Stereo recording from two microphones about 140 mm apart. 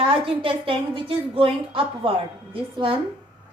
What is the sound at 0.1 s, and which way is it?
A woman's voice, 40° right (ahead or behind).